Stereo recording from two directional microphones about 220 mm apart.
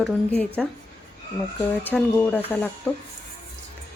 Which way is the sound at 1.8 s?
5° left (ahead or behind).